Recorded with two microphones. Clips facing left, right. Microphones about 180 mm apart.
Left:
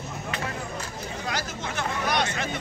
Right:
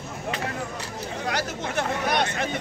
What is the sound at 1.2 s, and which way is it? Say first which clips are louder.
Speech: right 4 dB; 65° right (ahead or behind).